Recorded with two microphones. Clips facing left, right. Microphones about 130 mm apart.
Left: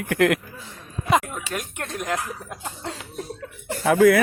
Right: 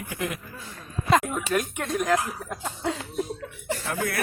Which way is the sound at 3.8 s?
90° left.